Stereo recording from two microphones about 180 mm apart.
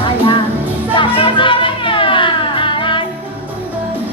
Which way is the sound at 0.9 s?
30° left (ahead or behind).